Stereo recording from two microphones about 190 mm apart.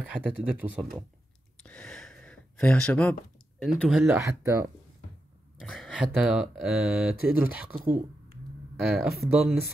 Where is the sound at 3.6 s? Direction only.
Centre (ahead or behind).